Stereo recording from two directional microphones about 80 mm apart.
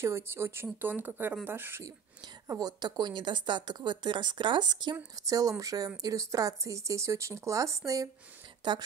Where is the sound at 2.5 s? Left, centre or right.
Right.